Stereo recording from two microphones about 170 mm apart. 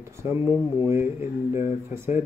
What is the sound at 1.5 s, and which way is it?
Speech, 15° right (ahead or behind).